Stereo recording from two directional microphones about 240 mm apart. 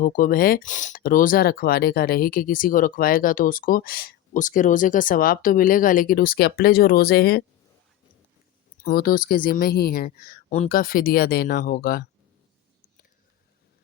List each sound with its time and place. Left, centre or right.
0.0 s speech: left
8.8 s speech: left